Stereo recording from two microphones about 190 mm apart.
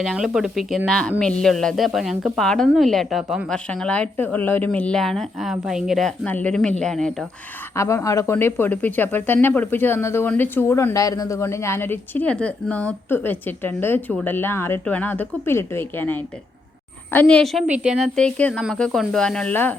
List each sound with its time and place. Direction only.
0.0 s a woman's voice: centre (ahead or behind)
7.8 s a woman's voice: 15° left (ahead or behind)